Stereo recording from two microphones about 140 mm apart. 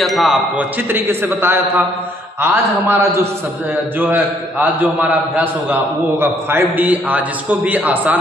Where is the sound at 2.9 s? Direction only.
20° right (ahead or behind).